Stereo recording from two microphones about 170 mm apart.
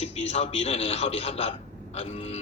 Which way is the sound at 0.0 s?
35° left (ahead or behind).